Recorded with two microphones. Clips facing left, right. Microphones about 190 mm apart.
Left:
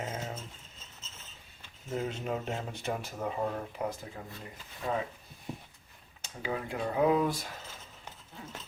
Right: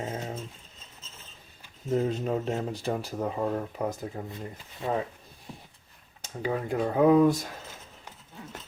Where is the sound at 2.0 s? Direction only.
35° right (ahead or behind).